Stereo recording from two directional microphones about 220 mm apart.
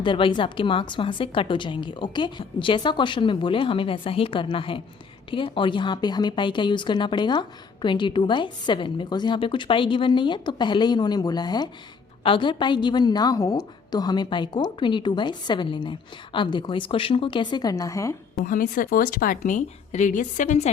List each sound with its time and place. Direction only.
0.0 s speech: 20° left (ahead or behind)
18.3 s speech: 40° left (ahead or behind)